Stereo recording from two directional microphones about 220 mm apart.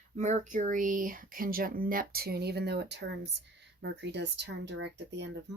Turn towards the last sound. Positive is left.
turn(degrees=-55)  # may be behind; listen again after turning